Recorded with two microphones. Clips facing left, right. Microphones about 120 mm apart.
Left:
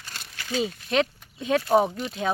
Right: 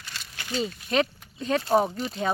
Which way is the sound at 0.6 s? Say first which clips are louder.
Left 1 dB; centre (ahead or behind).